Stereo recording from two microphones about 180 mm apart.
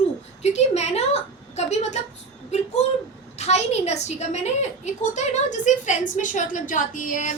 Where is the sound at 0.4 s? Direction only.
40° left (ahead or behind).